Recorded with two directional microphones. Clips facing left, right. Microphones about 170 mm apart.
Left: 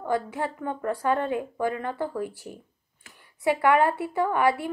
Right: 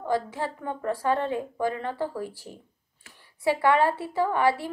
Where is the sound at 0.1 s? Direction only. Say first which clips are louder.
Even; 30° right (ahead or behind).